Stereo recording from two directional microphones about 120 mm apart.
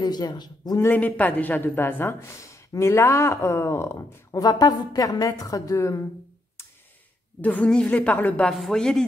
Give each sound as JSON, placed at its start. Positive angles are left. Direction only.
{"t": 0.0, "sound": "a man's voice", "side_deg": 35}
{"t": 0.7, "sound": "speech", "side_deg": 15}
{"t": 7.4, "sound": "a woman's voice", "side_deg": 10}
{"t": 8.5, "sound": "speech", "side_deg": 5}